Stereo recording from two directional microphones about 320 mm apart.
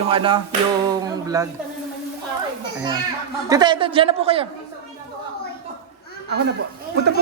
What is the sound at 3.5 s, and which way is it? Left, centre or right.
Speech, centre.